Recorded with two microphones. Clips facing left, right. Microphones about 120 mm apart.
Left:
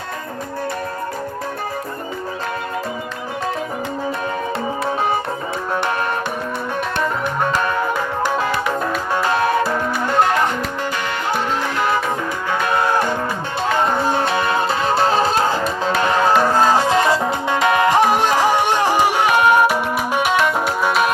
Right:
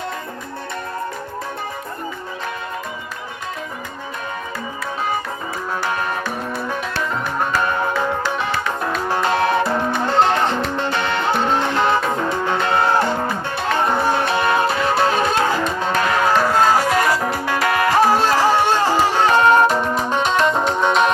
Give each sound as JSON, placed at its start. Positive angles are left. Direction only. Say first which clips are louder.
{"t": 9.2, "sound": "music", "louder": "even", "side_deg": -25}
{"t": 13.7, "sound": "music", "louder": "even", "side_deg": 25}
{"t": 14.3, "sound": "music", "louder": "right 1 dB", "side_deg": -25}
{"t": 14.6, "sound": "music", "louder": "even", "side_deg": 30}